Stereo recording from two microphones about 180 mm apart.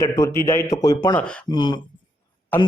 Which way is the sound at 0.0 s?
15° left (ahead or behind).